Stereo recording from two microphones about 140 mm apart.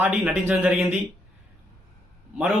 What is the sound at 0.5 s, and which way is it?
Speech, 10° right (ahead or behind).